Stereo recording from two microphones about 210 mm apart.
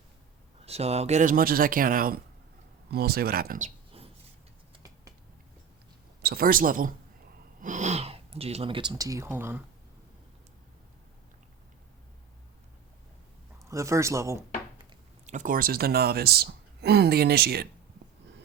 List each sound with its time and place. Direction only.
0.6 s speech: 30° right (ahead or behind)
3.9 s a sound: 25° right (ahead or behind)
6.2 s speech: 45° right (ahead or behind); by 9.6 s 10° right (ahead or behind)
13.7 s speech: 15° right (ahead or behind)
15.3 s speech: 40° right (ahead or behind)